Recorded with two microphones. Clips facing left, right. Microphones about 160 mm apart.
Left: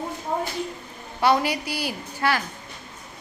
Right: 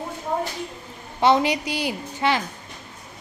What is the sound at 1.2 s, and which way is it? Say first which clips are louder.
A woman's voice: right 2 dB; 20° right (ahead or behind).